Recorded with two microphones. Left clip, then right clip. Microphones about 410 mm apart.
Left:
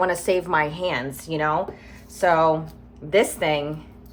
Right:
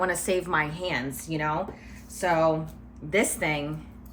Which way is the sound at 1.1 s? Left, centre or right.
Left.